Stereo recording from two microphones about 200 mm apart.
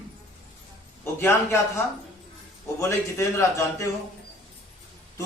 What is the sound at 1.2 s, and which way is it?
Speech, 10° left (ahead or behind).